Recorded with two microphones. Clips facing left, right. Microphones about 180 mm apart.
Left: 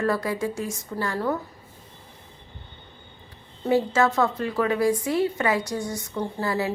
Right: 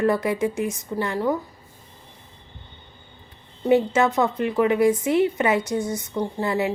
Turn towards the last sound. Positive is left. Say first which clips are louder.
# right 3 dB
turn(degrees=-20)  # may be behind; listen again after turning